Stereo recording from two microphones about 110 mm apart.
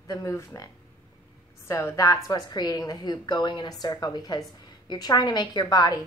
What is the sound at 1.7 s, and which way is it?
A woman's voice, 25° left (ahead or behind).